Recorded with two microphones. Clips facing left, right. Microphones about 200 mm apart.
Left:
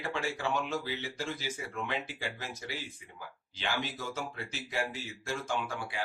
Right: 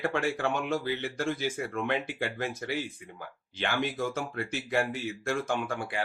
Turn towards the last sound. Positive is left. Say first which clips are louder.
# right 4 dB
turn(degrees=-55)  # may be behind; listen again after turning